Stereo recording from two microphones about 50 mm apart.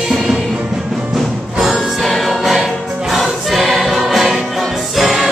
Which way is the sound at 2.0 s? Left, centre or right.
Centre.